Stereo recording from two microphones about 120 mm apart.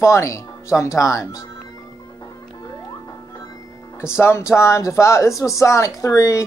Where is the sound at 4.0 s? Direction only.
20° left (ahead or behind).